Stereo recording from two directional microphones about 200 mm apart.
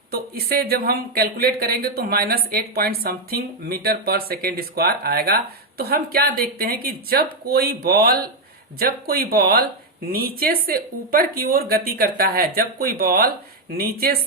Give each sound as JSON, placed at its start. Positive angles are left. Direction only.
{"t": 0.1, "sound": "speech", "side_deg": -50}